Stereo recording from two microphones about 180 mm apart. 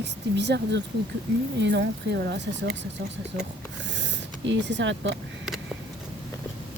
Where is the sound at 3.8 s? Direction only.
85° right.